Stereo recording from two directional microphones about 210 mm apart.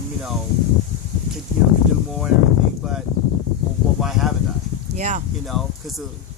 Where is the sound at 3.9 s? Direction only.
Centre (ahead or behind).